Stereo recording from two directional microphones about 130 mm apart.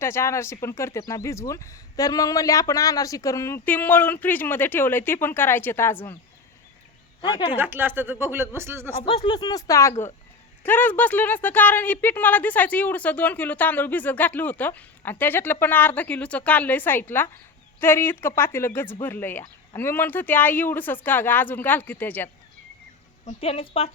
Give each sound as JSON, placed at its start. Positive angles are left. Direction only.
{"t": 0.0, "sound": "speech", "side_deg": 20}
{"t": 7.2, "sound": "a woman's voice", "side_deg": 35}
{"t": 7.5, "sound": "speech", "side_deg": -15}
{"t": 9.0, "sound": "speech", "side_deg": 40}
{"t": 23.2, "sound": "a woman's voice", "side_deg": 50}